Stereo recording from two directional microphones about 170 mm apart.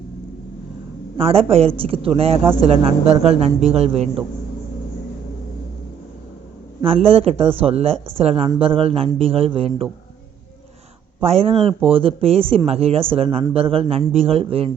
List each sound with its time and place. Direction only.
1.1 s a woman's voice: 35° right (ahead or behind)
6.8 s a woman's voice: 35° right (ahead or behind)
11.2 s a woman's voice: 35° right (ahead or behind)